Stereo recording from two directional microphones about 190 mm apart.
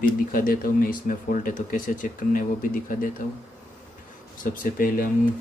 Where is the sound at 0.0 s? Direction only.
50° left (ahead or behind).